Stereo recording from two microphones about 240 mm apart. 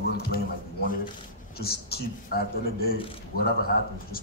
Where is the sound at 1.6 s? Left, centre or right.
Left.